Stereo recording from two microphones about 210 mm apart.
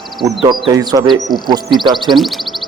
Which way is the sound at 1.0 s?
Centre (ahead or behind).